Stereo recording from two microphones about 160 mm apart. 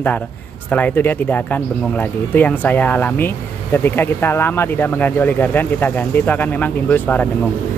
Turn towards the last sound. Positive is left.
turn(degrees=10)  # may be behind; listen again after turning